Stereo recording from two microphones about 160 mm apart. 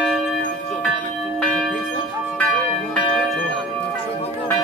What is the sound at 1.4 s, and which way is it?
Church bell, 5° left (ahead or behind).